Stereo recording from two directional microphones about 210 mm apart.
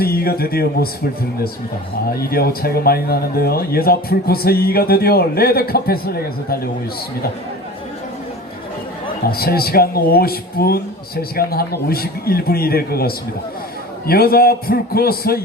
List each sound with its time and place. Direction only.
0.0 s speech: 45° left (ahead or behind)
2.0 s speech: 45° left (ahead or behind)
9.2 s speech: 45° left (ahead or behind)